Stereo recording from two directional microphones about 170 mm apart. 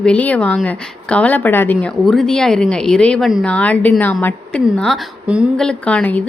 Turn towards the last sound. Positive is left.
turn(degrees=5)  # may be behind; listen again after turning